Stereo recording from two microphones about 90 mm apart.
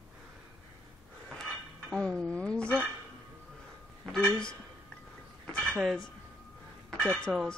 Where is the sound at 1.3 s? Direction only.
10° left (ahead or behind).